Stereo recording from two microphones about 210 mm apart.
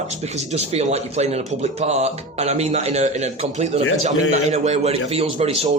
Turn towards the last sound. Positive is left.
turn(degrees=-25)  # may be behind; listen again after turning